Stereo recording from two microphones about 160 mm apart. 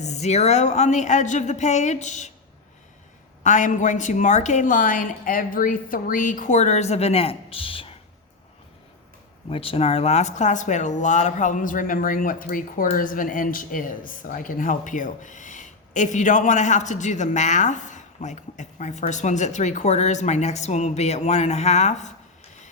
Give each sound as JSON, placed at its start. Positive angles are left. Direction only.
{"t": 0.0, "sound": "speech", "side_deg": 45}
{"t": 3.4, "sound": "speech", "side_deg": 50}
{"t": 9.5, "sound": "speech", "side_deg": 35}